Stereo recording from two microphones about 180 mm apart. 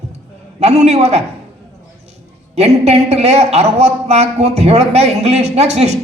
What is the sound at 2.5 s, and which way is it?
A woman's voice, 35° right (ahead or behind).